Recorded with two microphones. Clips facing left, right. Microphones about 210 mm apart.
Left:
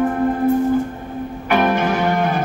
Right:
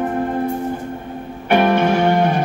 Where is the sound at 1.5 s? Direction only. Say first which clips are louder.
Right 3 dB; 30° right (ahead or behind).